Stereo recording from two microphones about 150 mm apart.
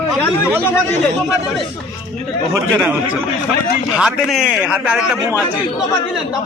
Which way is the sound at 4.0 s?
5° right (ahead or behind).